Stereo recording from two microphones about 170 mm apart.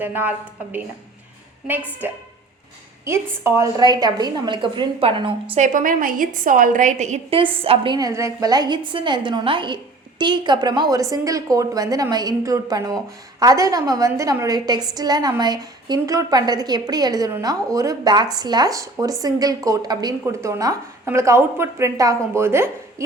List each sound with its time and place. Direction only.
0.0 s a woman's voice: 10° right (ahead or behind)
2.0 s a woman's voice: 10° right (ahead or behind); by 5.3 s 30° right (ahead or behind)
5.5 s a woman's voice: 50° right (ahead or behind)
7.3 s a woman's voice: 30° right (ahead or behind)
7.9 s a woman's voice: 20° right (ahead or behind)